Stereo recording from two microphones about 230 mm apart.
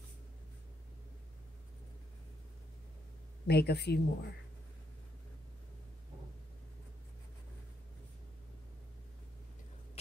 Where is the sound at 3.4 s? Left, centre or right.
Left.